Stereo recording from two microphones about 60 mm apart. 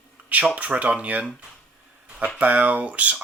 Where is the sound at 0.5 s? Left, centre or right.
Right.